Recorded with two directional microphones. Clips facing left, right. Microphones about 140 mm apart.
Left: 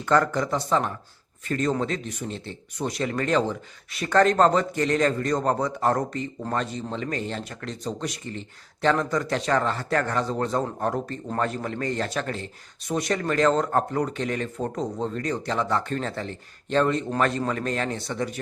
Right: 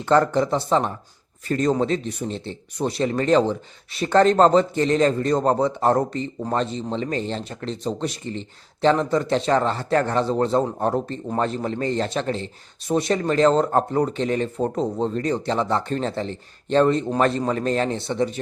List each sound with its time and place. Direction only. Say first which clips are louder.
0.0 s speech: right 4 dB; 30° right (ahead or behind)